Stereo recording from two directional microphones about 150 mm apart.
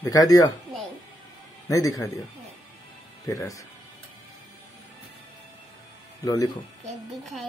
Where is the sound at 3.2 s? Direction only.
20° left (ahead or behind).